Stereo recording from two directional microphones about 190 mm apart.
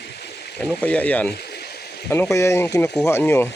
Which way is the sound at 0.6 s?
5° left (ahead or behind).